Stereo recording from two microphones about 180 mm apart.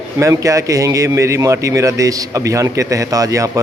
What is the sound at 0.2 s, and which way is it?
Speech, 15° right (ahead or behind).